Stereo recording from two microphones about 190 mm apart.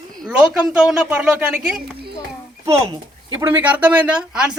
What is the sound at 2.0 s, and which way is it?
Children playing, 55° right (ahead or behind).